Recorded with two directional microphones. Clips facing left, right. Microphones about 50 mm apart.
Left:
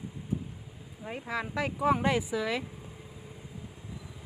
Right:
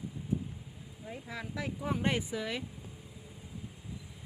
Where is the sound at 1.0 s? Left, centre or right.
Left.